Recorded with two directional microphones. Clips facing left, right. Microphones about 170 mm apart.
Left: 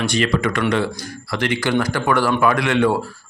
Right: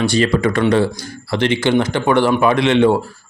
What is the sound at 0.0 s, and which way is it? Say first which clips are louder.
A man's voice: right 4 dB; 30° right (ahead or behind).